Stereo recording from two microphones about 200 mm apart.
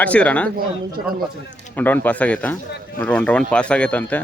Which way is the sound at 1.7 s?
10° left (ahead or behind).